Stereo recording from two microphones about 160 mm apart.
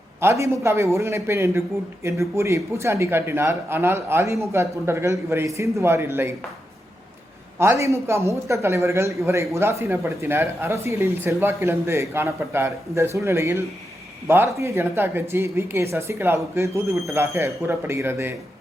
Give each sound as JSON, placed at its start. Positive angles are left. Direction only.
{"t": 0.2, "sound": "a man's voice", "side_deg": -15}
{"t": 7.6, "sound": "a man's voice", "side_deg": -15}